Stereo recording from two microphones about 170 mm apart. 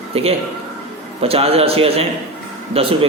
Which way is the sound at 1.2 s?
35° right (ahead or behind).